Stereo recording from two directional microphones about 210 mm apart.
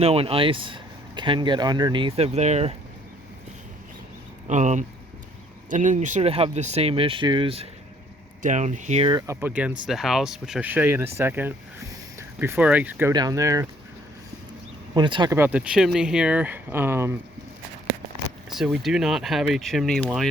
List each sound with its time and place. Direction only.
0.0 s speech: 30° right (ahead or behind)
4.4 s speech: 35° right (ahead or behind); by 13.7 s 15° right (ahead or behind)
14.9 s speech: 20° right (ahead or behind)
15.4 s speech: 5° right (ahead or behind)
18.5 s speech: centre (ahead or behind)